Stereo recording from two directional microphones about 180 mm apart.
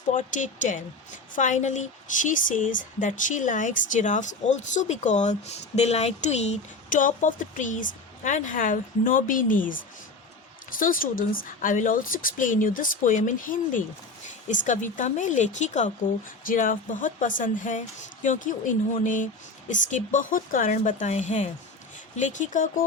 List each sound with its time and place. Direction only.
0.1 s a woman's voice: 45° left (ahead or behind)